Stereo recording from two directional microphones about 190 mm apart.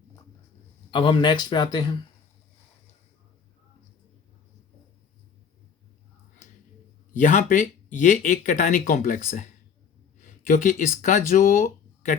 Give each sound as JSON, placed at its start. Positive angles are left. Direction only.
{"t": 0.9, "sound": "speech", "side_deg": 25}
{"t": 7.1, "sound": "speech", "side_deg": 45}